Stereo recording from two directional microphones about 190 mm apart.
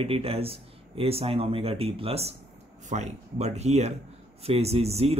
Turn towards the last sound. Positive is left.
turn(degrees=-35)  # may be behind; listen again after turning